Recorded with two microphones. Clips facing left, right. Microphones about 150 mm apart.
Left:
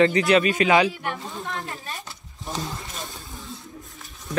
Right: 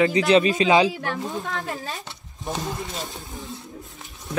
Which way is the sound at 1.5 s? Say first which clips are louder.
Right 4 dB; 90° right.